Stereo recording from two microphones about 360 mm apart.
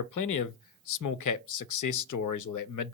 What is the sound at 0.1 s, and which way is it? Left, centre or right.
Speech, left.